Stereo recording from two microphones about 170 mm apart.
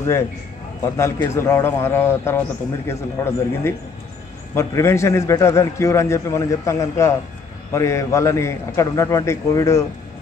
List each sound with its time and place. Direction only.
0.9 s a man's voice: 15° left (ahead or behind)